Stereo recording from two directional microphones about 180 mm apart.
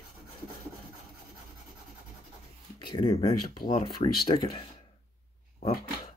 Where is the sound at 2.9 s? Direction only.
35° left (ahead or behind).